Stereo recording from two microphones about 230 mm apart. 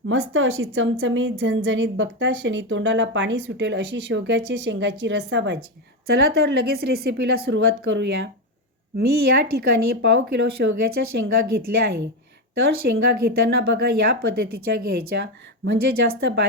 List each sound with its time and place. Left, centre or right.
0.1 s a woman's voice: right